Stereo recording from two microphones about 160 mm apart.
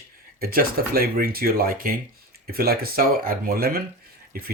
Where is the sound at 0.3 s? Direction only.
70° right (ahead or behind).